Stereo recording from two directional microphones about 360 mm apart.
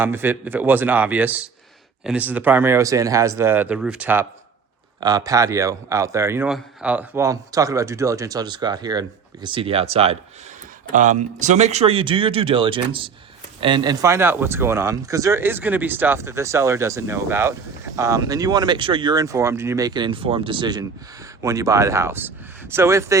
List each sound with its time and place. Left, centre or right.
0.0 s speech: centre